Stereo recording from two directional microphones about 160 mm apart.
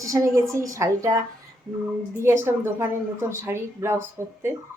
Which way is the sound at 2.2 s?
15° right (ahead or behind).